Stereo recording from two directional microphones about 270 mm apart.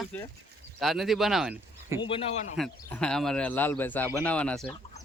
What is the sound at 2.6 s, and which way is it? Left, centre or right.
Speech, centre.